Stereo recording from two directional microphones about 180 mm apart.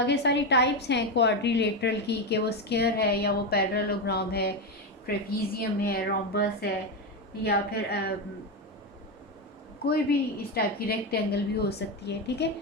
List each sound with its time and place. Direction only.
0.0 s a woman's voice: 70° left (ahead or behind)
9.8 s a woman's voice: 60° left (ahead or behind)